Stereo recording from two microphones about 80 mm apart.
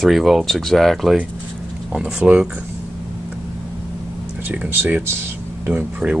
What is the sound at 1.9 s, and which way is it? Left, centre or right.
Speech, centre.